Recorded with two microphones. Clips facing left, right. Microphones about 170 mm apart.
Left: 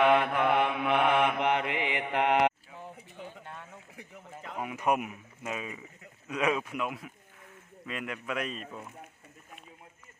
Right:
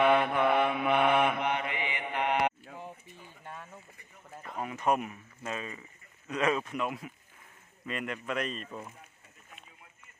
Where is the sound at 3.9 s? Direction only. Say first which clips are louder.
Left 4 dB; 80° left.